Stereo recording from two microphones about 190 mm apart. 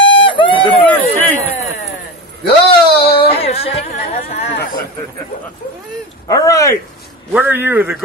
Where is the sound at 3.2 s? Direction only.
30° left (ahead or behind).